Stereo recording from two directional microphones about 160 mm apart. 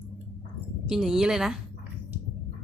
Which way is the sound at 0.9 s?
5° right (ahead or behind).